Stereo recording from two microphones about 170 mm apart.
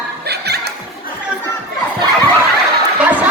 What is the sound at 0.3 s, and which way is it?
Music, 70° right (ahead or behind).